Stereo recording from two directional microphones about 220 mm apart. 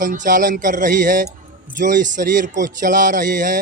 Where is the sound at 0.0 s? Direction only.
35° right (ahead or behind).